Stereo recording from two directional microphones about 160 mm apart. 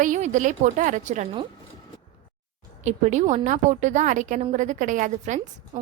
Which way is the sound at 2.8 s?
50° right (ahead or behind).